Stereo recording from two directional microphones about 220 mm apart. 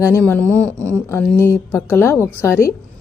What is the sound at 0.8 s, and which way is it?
Speech, 15° right (ahead or behind).